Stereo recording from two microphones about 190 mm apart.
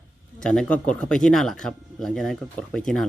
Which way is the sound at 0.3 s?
5° left (ahead or behind).